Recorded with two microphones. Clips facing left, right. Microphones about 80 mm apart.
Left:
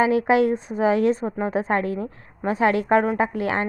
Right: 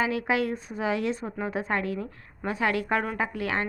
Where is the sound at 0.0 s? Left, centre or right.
Left.